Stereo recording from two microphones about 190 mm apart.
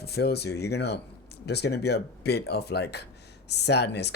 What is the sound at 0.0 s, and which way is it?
Speech, 60° left (ahead or behind).